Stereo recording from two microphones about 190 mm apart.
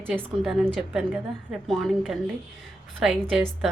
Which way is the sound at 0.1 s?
Centre (ahead or behind).